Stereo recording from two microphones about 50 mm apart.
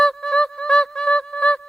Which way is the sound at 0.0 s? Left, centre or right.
Centre.